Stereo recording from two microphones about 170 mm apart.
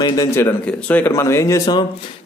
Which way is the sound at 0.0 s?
20° left (ahead or behind).